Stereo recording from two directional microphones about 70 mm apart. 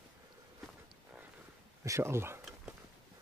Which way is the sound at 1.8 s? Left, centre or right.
Right.